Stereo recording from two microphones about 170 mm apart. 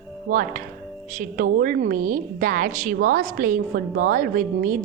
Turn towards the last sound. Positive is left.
turn(degrees=-55)  # may be behind; listen again after turning